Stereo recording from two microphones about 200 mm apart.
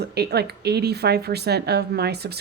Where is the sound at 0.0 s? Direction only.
55° right (ahead or behind).